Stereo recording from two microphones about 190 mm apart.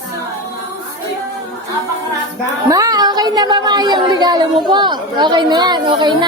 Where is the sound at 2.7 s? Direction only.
20° right (ahead or behind).